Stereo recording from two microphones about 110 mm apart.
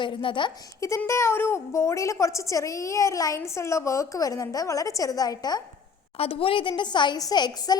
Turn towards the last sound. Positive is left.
turn(degrees=40)  # may be behind; listen again after turning